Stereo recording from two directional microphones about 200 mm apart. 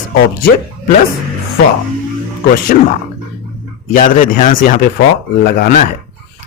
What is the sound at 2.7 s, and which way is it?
Speech, 40° left (ahead or behind).